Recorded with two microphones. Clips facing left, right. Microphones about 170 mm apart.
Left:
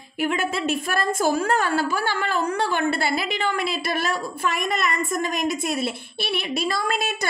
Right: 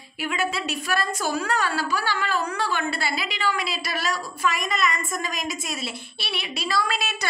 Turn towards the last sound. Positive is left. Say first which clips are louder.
# left 2 dB
turn(degrees=50)  # may be behind; listen again after turning